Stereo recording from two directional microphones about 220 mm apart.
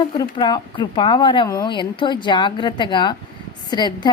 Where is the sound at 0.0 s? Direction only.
20° left (ahead or behind).